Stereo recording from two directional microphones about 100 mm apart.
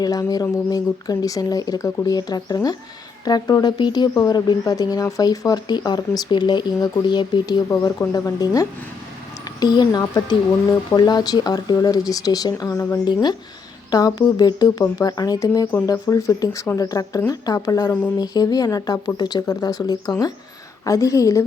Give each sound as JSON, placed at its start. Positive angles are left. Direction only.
{"t": 0.0, "sound": "speech", "side_deg": 40}
{"t": 7.7, "sound": "speech", "side_deg": 30}
{"t": 13.9, "sound": "speech", "side_deg": 40}